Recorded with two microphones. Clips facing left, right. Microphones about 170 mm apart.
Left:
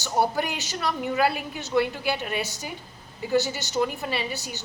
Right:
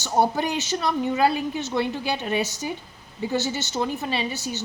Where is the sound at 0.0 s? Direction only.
20° right (ahead or behind).